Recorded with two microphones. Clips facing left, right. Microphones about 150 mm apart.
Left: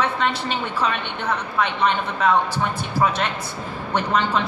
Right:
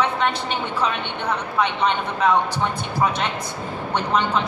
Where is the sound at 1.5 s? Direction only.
15° right (ahead or behind).